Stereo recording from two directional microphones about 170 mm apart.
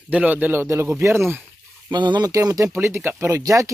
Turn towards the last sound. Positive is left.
turn(degrees=-20)  # may be behind; listen again after turning